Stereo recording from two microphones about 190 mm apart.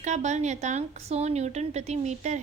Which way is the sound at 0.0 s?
40° right (ahead or behind).